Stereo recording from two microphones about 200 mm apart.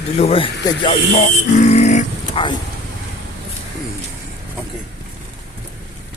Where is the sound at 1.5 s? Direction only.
35° left (ahead or behind).